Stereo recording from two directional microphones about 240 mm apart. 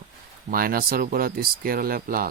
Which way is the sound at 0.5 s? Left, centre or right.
Right.